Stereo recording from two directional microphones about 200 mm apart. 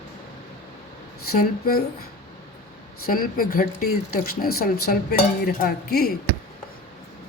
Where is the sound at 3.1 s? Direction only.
45° left (ahead or behind).